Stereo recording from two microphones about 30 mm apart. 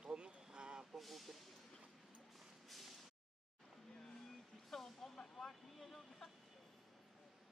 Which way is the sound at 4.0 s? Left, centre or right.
Centre.